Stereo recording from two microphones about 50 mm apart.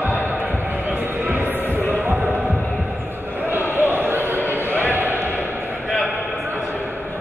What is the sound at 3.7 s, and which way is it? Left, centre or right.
Basketball bounce, right.